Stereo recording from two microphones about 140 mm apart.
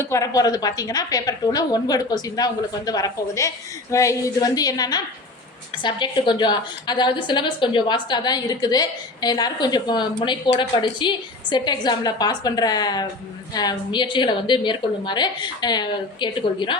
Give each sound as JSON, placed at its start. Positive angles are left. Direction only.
{"t": 0.0, "sound": "a woman's voice", "side_deg": 20}